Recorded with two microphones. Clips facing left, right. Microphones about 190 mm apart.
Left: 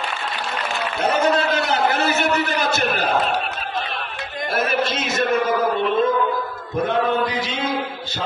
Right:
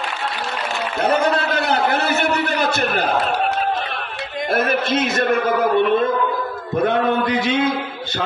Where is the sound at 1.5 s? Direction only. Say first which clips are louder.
Right 1 dB; 60° right (ahead or behind).